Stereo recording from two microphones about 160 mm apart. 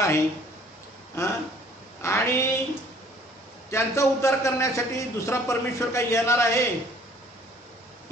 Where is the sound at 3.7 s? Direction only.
15° left (ahead or behind).